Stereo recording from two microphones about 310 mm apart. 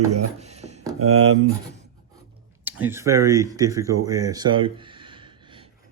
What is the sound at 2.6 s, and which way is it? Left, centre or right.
Speech, centre.